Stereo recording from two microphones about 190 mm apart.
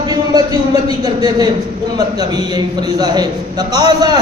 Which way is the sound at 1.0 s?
20° right (ahead or behind).